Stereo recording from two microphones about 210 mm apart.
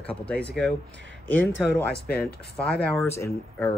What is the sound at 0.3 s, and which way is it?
Speech, 5° left (ahead or behind).